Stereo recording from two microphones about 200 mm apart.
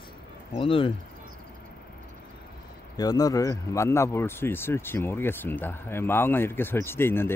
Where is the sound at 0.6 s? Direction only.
25° left (ahead or behind).